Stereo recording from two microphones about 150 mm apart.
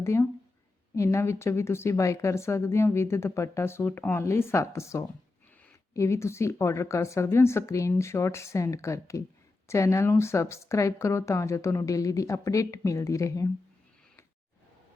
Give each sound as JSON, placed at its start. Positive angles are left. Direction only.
{"t": 0.0, "sound": "a woman's voice", "side_deg": 20}